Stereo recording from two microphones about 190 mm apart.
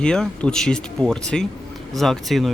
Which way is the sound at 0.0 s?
5° left (ahead or behind).